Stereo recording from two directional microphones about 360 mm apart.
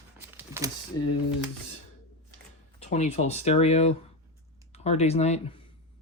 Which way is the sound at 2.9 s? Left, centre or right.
Centre.